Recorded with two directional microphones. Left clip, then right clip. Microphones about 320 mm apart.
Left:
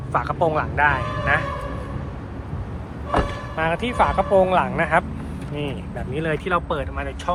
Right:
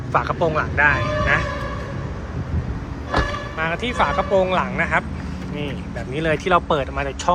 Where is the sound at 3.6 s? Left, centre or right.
Centre.